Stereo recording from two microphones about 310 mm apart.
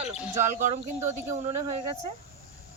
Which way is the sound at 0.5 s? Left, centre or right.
Right.